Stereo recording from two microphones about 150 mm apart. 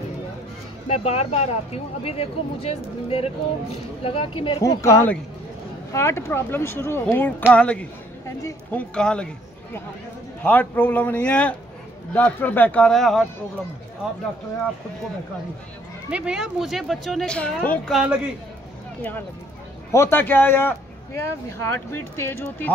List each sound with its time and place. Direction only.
0.8 s speech: 40° left (ahead or behind)
4.6 s a man's voice: 20° left (ahead or behind)
10.4 s a man's voice: 10° left (ahead or behind)
16.1 s a man's voice: 5° right (ahead or behind); by 22.7 s 15° left (ahead or behind)